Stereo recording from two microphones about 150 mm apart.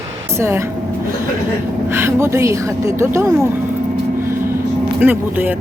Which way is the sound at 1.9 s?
15° right (ahead or behind).